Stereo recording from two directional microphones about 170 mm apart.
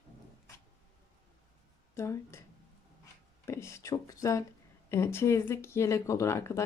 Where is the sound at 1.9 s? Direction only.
15° left (ahead or behind).